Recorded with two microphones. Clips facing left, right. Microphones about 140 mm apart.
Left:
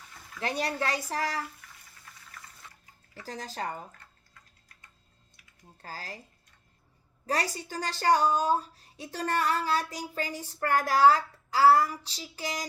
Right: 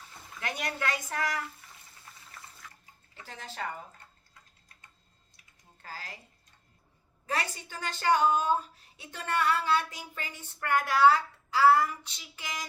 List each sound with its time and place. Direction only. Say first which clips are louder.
0.3 s a woman's voice: left 5 dB; 35° left (ahead or behind)
1.6 s frying: even; 25° right (ahead or behind)
2.1 s water: even; 25° right (ahead or behind)
2.6 s bathtub: right 1 dB; 30° left (ahead or behind)
3.2 s a woman's voice: left 3 dB; 40° left (ahead or behind)
5.7 s a woman's voice: left 3 dB; 35° left (ahead or behind)
7.3 s a woman's voice: left 3 dB; 40° left (ahead or behind)